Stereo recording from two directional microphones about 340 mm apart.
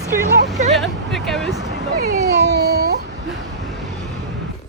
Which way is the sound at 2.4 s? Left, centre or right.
Right.